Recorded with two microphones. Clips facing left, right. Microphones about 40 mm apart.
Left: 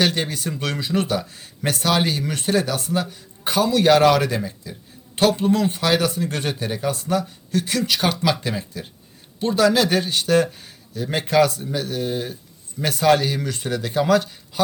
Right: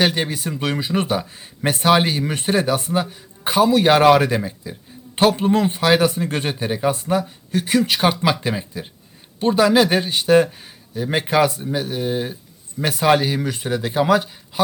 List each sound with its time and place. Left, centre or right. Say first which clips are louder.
0.0 s a man's voice: right 2 dB; centre